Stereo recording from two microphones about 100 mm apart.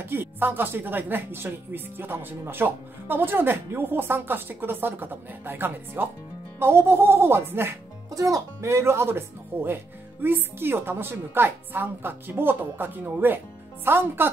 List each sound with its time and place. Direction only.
0.1 s speech: 20° right (ahead or behind)